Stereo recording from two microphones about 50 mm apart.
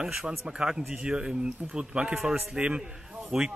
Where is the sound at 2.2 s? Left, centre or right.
Centre.